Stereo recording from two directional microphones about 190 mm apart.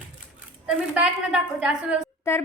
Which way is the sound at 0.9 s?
5° right (ahead or behind).